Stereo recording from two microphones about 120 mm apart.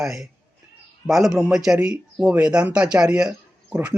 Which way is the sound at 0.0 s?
5° right (ahead or behind).